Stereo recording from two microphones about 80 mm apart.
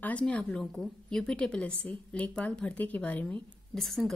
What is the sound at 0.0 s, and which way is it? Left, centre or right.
A woman's voice, centre.